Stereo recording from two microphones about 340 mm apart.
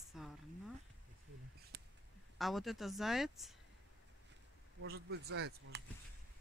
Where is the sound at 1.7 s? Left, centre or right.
Right.